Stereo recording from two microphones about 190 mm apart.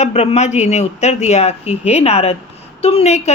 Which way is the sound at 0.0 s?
35° left (ahead or behind).